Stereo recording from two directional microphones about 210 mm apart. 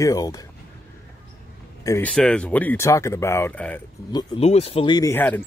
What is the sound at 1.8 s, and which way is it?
Speech, 15° left (ahead or behind).